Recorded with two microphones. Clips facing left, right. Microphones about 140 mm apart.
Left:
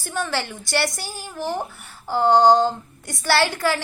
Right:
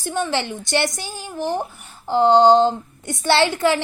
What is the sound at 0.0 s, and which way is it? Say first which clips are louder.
A woman's voice: right 3 dB; 20° right (ahead or behind).